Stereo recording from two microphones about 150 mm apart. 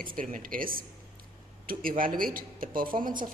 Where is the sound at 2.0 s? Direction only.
70° right (ahead or behind).